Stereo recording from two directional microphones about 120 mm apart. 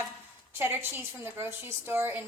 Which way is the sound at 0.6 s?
20° right (ahead or behind).